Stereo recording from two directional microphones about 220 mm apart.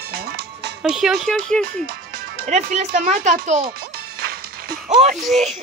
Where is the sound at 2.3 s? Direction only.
35° right (ahead or behind).